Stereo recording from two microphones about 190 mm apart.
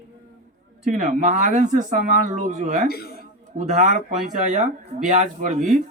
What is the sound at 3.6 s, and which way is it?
Speech, 40° right (ahead or behind).